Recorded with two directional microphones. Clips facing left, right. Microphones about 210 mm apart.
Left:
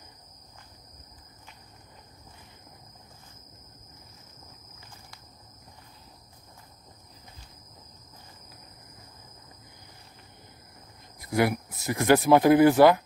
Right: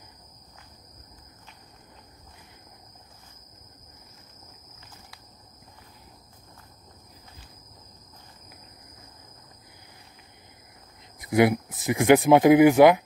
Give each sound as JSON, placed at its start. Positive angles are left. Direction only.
{"t": 11.2, "sound": "speech", "side_deg": -20}